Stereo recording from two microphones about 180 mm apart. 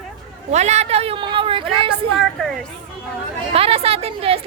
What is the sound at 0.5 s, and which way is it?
A woman's voice, 40° right (ahead or behind).